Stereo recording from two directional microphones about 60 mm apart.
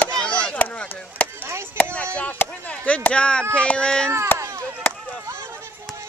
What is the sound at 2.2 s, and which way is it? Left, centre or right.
Speech, left.